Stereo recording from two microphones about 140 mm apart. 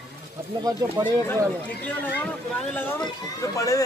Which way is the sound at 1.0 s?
25° right (ahead or behind).